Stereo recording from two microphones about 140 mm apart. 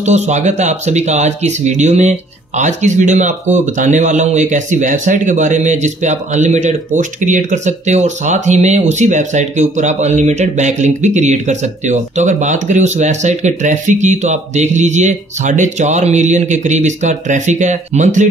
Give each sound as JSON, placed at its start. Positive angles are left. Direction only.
{"t": 0.0, "sound": "speech", "side_deg": -55}